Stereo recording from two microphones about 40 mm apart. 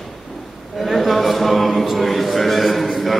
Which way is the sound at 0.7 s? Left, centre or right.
Centre.